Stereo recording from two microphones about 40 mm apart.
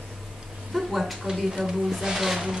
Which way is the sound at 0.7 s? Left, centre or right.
Centre.